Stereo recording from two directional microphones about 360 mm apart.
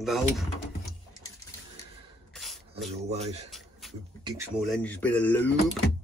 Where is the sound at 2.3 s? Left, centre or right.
Centre.